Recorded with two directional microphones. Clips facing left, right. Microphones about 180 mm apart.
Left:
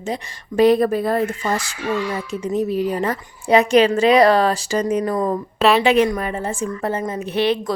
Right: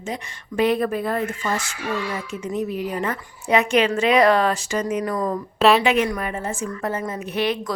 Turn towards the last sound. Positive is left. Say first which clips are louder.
# left 4 dB
turn(degrees=30)  # may be behind; listen again after turning